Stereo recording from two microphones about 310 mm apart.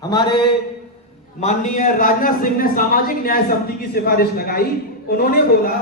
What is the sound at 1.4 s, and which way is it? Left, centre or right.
A man's voice, left.